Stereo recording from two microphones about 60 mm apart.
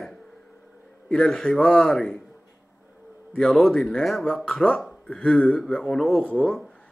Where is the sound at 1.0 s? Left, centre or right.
Centre.